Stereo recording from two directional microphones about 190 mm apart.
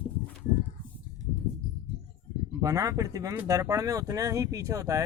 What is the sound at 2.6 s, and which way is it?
Speech, 20° right (ahead or behind).